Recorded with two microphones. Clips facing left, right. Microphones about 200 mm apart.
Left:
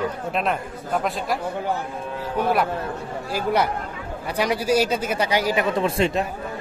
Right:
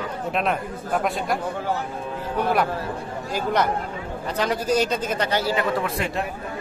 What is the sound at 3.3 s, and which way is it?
A man's voice, 10° left (ahead or behind).